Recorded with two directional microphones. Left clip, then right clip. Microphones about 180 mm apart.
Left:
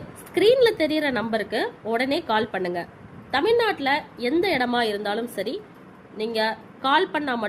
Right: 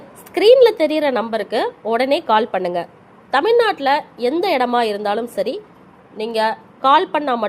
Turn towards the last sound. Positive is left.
turn(degrees=-20)  # may be behind; listen again after turning